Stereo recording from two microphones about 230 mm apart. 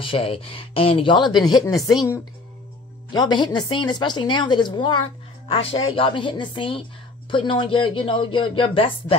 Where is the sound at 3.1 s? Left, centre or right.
Centre.